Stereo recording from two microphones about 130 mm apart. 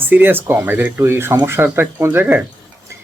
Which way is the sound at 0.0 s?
15° right (ahead or behind).